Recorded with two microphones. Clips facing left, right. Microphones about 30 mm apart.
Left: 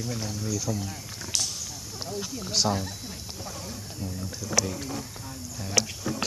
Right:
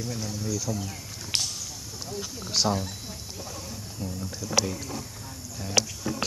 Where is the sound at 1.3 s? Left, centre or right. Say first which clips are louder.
Right 1 dB; right.